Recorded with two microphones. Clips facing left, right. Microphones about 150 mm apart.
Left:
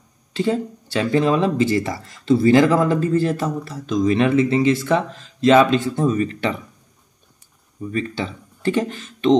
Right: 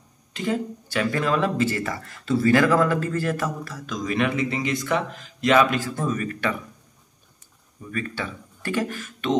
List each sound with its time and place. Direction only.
0.3 s speech: 30° left (ahead or behind)
7.9 s speech: 25° left (ahead or behind)